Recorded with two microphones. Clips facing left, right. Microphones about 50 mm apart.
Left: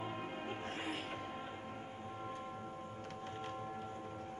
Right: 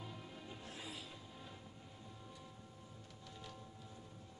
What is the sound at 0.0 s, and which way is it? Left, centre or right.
Music, left.